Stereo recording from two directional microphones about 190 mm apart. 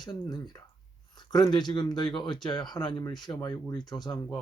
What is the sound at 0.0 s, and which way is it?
Speech, 20° left (ahead or behind).